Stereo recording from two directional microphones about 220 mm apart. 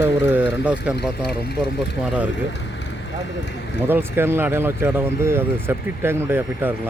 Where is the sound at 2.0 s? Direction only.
5° right (ahead or behind).